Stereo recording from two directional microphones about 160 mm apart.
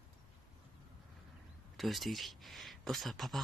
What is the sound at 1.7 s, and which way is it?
Speech, centre (ahead or behind).